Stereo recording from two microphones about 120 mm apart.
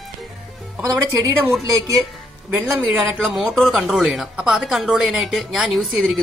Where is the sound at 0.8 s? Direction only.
30° right (ahead or behind).